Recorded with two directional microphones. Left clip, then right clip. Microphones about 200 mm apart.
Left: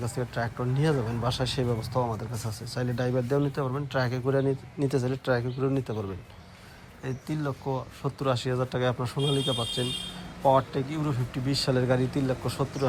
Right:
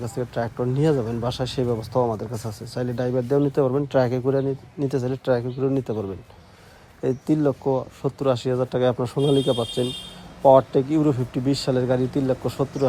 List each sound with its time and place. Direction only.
0.0 s speech: 25° right (ahead or behind)
4.2 s speech: 15° right (ahead or behind)
7.0 s speech: 35° right (ahead or behind)
9.1 s speech: 15° right (ahead or behind)